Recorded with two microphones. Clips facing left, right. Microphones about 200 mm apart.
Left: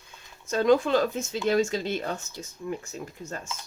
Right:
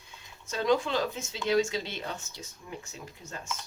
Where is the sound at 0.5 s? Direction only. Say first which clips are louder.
Left 6 dB; 50° left (ahead or behind).